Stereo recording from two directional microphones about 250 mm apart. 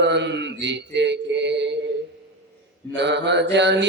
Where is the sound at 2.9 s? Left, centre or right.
Right.